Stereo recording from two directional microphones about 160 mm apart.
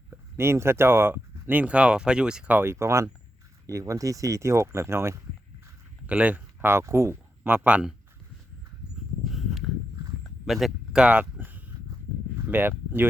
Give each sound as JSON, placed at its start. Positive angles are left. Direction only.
{"t": 0.1, "sound": "speech", "side_deg": -15}
{"t": 9.2, "sound": "a sound", "side_deg": 0}
{"t": 12.5, "sound": "speech", "side_deg": -10}